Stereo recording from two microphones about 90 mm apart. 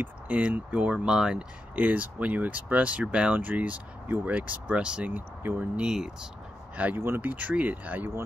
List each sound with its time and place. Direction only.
0.0 s speech: 15° right (ahead or behind)
1.8 s speech: 15° right (ahead or behind)
5.8 s speech: 5° right (ahead or behind)
7.0 s speech: 25° right (ahead or behind)